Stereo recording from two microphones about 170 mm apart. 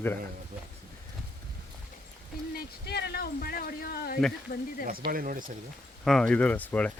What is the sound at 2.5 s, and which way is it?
Speech, 75° left (ahead or behind).